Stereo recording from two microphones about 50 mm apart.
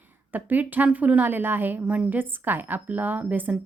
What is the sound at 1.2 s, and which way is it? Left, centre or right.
Speech, right.